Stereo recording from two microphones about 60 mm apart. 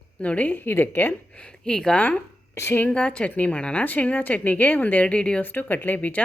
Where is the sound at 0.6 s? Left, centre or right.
Left.